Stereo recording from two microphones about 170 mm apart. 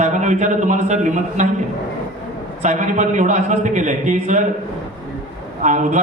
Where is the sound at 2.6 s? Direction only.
45° right (ahead or behind).